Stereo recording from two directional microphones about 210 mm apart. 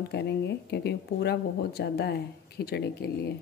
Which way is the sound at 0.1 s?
55° left (ahead or behind).